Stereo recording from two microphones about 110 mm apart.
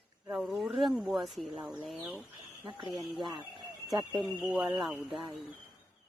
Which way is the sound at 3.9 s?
Centre (ahead or behind).